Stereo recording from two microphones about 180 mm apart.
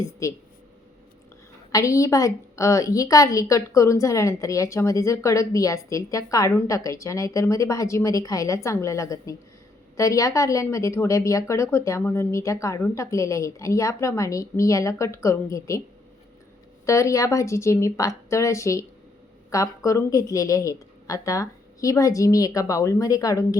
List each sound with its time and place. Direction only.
0.2 s a woman's voice: 20° left (ahead or behind)
1.7 s a woman's voice: 15° left (ahead or behind)
16.8 s a woman's voice: 15° left (ahead or behind)